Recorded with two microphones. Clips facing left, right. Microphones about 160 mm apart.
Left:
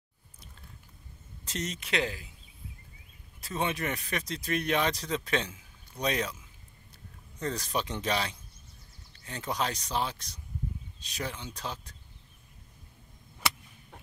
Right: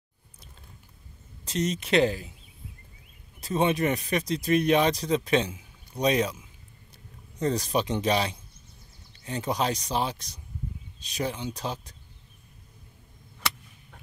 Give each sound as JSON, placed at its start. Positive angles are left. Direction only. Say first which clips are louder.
{"t": 1.4, "sound": "speech", "louder": "right 8 dB", "side_deg": -15}
{"t": 1.8, "sound": "speech", "louder": "right 10 dB", "side_deg": -30}
{"t": 3.3, "sound": "speech", "louder": "right 7 dB", "side_deg": -20}
{"t": 7.3, "sound": "speech", "louder": "right 6 dB", "side_deg": -15}